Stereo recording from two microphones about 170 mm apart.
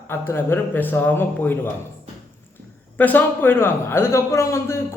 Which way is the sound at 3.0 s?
10° left (ahead or behind).